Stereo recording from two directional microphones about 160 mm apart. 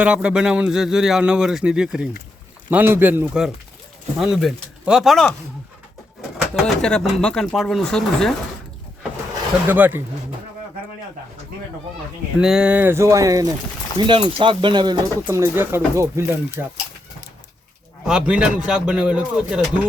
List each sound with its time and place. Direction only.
0.0 s a man's voice: 5° right (ahead or behind)
6.5 s a man's voice: 5° left (ahead or behind)
9.6 s speech: 10° right (ahead or behind)
12.4 s speech: 5° right (ahead or behind); by 14.9 s 30° right (ahead or behind)
15.3 s speech: 15° right (ahead or behind)
18.0 s a man's voice: 5° right (ahead or behind)